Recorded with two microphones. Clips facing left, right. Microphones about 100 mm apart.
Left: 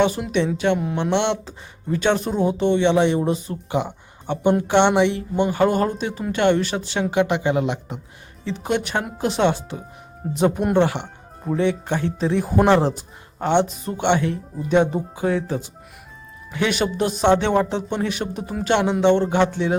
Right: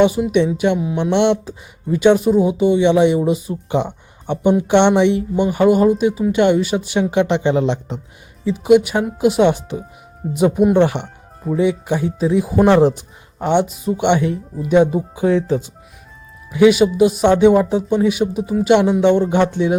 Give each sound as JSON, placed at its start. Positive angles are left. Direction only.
{"t": 0.3, "sound": "speech", "side_deg": -15}
{"t": 8.4, "sound": "speech", "side_deg": -5}
{"t": 12.6, "sound": "a man's voice", "side_deg": -15}
{"t": 16.5, "sound": "speech", "side_deg": -10}